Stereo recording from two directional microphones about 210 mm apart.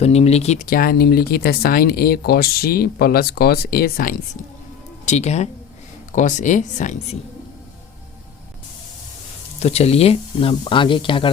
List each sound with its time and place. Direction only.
0.0 s speech: 30° left (ahead or behind)
5.0 s speech: 35° left (ahead or behind)
9.6 s speech: 30° left (ahead or behind)